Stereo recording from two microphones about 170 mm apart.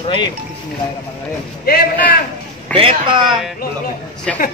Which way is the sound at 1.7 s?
55° left (ahead or behind).